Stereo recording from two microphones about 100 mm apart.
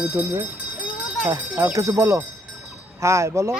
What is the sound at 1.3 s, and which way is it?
Speech, 30° right (ahead or behind).